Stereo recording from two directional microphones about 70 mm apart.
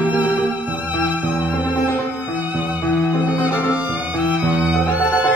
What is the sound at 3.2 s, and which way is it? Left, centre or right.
Music, right.